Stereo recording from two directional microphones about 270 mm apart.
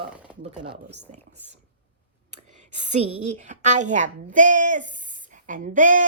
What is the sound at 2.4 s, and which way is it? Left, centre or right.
Whispering, right.